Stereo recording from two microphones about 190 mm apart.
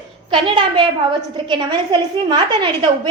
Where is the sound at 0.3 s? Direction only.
25° right (ahead or behind).